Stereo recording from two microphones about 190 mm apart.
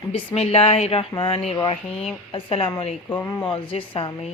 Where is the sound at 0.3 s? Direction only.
30° left (ahead or behind).